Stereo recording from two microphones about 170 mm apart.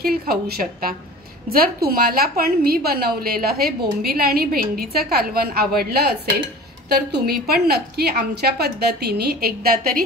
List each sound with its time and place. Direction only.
0.0 s a woman's voice: 65° right (ahead or behind)